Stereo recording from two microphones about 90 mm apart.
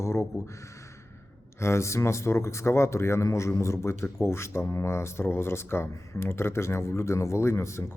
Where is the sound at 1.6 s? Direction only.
30° left (ahead or behind).